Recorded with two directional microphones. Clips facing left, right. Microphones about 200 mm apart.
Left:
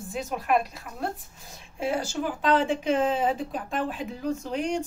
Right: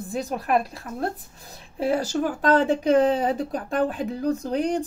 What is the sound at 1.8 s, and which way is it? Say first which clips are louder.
Speech: right 5 dB; 40° right (ahead or behind).